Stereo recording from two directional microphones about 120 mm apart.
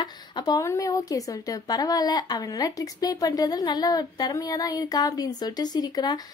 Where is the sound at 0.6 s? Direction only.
25° left (ahead or behind).